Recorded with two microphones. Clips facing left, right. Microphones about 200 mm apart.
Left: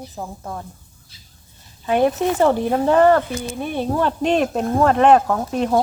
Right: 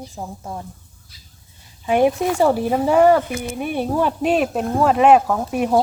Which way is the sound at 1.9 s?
10° right (ahead or behind).